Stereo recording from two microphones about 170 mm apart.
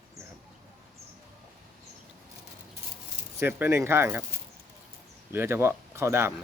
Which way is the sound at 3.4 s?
10° right (ahead or behind).